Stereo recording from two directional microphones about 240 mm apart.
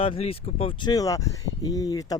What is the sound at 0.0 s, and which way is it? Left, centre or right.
Speech, left.